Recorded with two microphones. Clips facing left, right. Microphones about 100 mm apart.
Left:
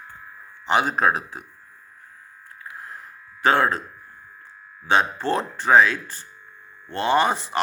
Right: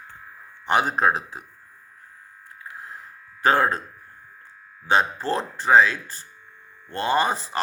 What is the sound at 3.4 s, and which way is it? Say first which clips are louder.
Speech: even; 40° right (ahead or behind).